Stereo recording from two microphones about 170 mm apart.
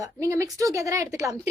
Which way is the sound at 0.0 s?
20° right (ahead or behind).